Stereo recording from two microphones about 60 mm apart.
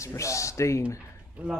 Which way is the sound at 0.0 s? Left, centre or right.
Left.